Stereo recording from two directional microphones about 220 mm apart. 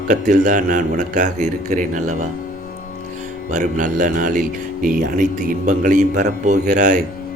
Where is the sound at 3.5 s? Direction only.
35° right (ahead or behind).